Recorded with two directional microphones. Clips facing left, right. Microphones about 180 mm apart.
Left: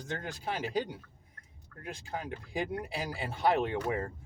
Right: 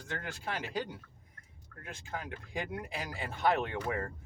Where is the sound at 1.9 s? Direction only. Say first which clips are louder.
Left 3 dB; 30° left (ahead or behind).